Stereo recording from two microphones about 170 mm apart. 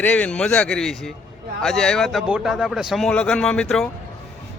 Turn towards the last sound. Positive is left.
turn(degrees=5)  # may be behind; listen again after turning